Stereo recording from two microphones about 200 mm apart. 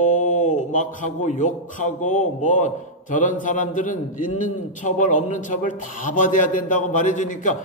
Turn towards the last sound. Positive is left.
turn(degrees=40)  # may be behind; listen again after turning